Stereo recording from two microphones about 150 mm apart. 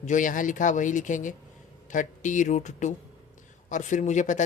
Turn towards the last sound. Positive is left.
turn(degrees=55)  # may be behind; listen again after turning